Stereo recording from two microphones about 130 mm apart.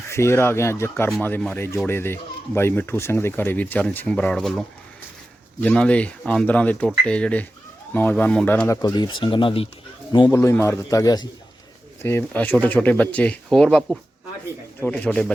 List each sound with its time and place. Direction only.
0.1 s speech: 20° left (ahead or behind)
8.8 s speech: 35° left (ahead or behind)
10.2 s speech: 15° left (ahead or behind)
12.0 s speech: 15° left (ahead or behind)